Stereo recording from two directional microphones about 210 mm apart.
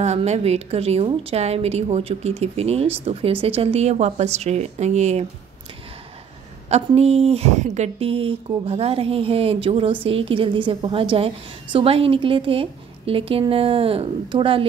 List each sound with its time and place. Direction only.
0.0 s speech: 30° right (ahead or behind)
6.7 s speech: 30° right (ahead or behind)